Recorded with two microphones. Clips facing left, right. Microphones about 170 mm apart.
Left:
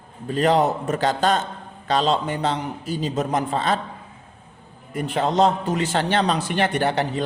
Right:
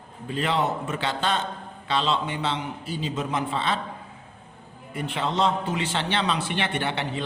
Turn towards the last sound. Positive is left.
turn(degrees=40)  # may be behind; listen again after turning